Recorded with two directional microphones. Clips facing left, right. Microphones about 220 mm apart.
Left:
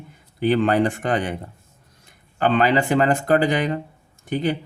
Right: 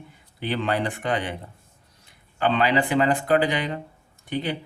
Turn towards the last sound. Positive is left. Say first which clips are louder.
# left 5 dB
turn(degrees=45)  # may be behind; listen again after turning